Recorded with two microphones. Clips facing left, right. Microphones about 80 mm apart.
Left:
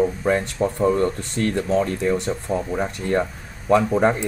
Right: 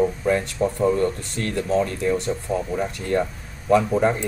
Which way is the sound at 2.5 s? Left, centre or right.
Left.